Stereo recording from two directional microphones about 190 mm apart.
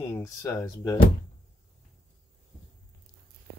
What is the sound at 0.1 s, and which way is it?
Speech, 15° left (ahead or behind).